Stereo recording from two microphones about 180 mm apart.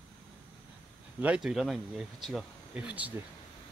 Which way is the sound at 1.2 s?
5° right (ahead or behind).